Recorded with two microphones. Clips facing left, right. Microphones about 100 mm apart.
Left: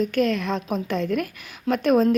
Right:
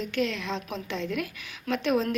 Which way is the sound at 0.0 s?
45° left (ahead or behind).